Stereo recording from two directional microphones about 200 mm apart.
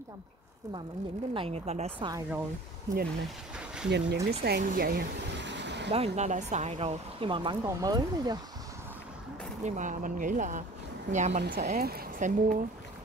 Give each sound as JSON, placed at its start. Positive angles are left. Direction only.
{"t": 1.3, "sound": "speech", "side_deg": -30}
{"t": 2.0, "sound": "speech", "side_deg": -15}
{"t": 3.5, "sound": "vehicle", "side_deg": -5}
{"t": 3.9, "sound": "speech", "side_deg": -60}
{"t": 5.9, "sound": "speech", "side_deg": -30}
{"t": 9.6, "sound": "speech", "side_deg": -40}
{"t": 11.4, "sound": "speech", "side_deg": -50}